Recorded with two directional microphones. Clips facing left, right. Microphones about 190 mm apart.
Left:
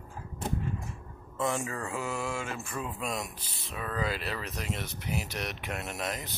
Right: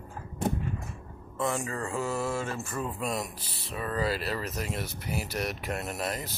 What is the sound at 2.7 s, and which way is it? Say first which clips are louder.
Speech: right 2 dB; centre (ahead or behind).